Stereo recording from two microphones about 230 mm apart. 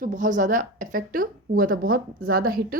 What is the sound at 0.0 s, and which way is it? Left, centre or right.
A woman's voice, right.